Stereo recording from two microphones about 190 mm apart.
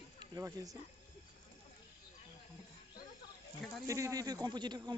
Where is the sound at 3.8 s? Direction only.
15° right (ahead or behind).